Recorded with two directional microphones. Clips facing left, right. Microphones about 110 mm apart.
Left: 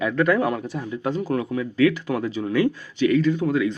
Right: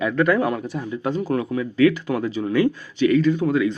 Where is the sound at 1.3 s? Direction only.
40° right (ahead or behind).